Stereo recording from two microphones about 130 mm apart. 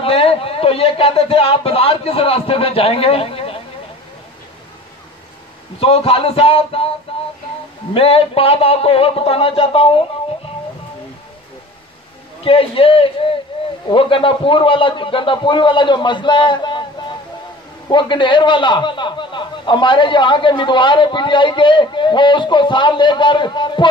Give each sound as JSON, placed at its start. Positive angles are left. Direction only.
{"t": 0.0, "sound": "a man's voice", "side_deg": 45}
{"t": 5.8, "sound": "a man's voice", "side_deg": 50}
{"t": 7.1, "sound": "child singing", "side_deg": 45}
{"t": 7.9, "sound": "a man's voice", "side_deg": 45}
{"t": 12.4, "sound": "a man's voice", "side_deg": 45}
{"t": 17.8, "sound": "a man's voice", "side_deg": 35}